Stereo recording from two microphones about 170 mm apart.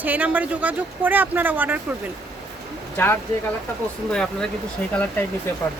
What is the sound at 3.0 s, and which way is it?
Speech, 10° left (ahead or behind).